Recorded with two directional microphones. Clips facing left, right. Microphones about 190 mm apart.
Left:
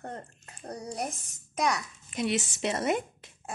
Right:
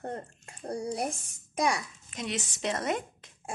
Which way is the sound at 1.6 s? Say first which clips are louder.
Even; 30° right (ahead or behind).